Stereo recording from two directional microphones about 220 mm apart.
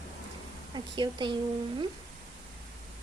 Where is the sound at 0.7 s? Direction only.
20° right (ahead or behind).